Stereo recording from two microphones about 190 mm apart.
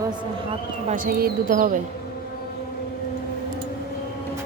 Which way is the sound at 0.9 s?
45° right (ahead or behind).